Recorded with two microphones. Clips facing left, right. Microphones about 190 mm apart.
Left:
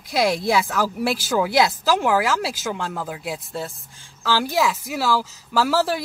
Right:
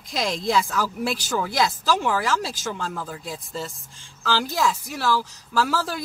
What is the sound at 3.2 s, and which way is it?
Speech, 60° left (ahead or behind).